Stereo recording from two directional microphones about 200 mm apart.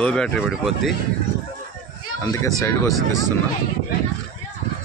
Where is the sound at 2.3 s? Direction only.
15° left (ahead or behind).